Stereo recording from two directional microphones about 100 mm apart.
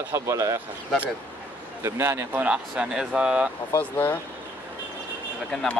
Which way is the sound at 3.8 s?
20° left (ahead or behind).